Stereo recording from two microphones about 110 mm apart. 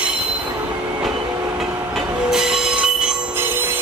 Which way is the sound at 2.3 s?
5° right (ahead or behind).